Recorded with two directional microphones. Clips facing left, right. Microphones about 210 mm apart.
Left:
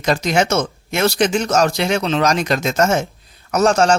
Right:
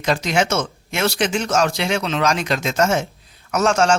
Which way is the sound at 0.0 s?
40° left (ahead or behind).